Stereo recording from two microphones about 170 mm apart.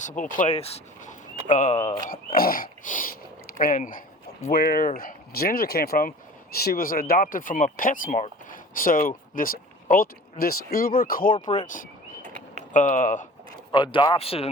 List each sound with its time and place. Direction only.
0.3 s speech: 40° left (ahead or behind)
2.0 s speech: 60° left (ahead or behind)
4.5 s speech: 65° left (ahead or behind)
11.3 s speech: 25° left (ahead or behind)
11.6 s speech: 50° left (ahead or behind)
13.7 s speech: 30° left (ahead or behind)